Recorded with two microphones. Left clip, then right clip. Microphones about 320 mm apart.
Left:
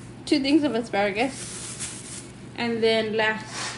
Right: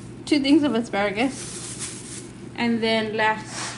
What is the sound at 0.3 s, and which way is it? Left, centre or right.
Speech, centre.